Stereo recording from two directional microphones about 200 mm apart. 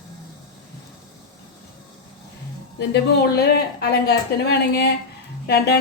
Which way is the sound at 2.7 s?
55° left (ahead or behind).